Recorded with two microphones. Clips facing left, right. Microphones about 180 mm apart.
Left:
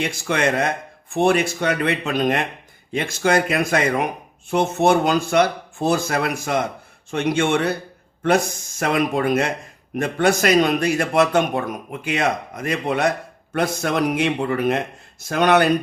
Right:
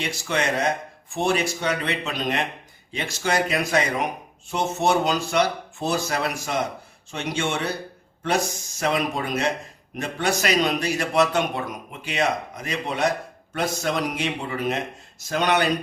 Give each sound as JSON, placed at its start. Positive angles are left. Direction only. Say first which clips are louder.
{"t": 0.0, "sound": "a man's voice", "louder": "left 4 dB", "side_deg": 55}